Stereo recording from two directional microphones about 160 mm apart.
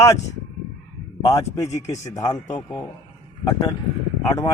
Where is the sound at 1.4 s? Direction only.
45° left (ahead or behind).